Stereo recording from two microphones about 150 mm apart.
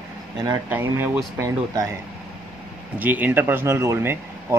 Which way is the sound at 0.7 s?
15° right (ahead or behind).